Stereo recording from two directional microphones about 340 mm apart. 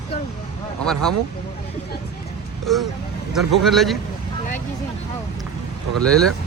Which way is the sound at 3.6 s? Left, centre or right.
Centre.